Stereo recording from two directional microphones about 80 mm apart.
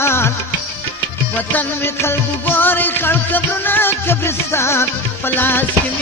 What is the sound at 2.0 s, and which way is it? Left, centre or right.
Music, left.